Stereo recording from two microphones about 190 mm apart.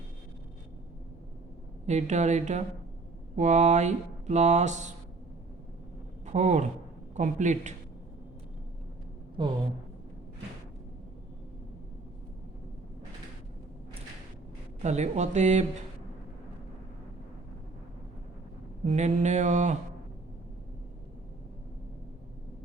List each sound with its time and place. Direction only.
1.9 s speech: 35° right (ahead or behind)
6.2 s speech: 35° right (ahead or behind)
9.4 s a woman's voice: 25° right (ahead or behind)
14.8 s speech: 35° right (ahead or behind)
18.9 s speech: 35° right (ahead or behind)